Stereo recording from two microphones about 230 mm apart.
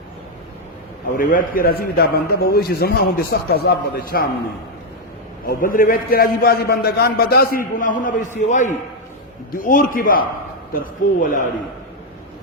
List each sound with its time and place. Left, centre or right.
1.1 s a man's voice: left
5.5 s a man's voice: left